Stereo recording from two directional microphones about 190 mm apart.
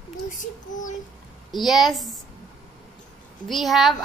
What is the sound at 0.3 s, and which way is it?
Speech, 40° left (ahead or behind).